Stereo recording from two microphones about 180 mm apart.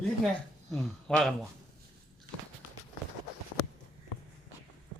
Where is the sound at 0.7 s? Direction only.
Centre (ahead or behind).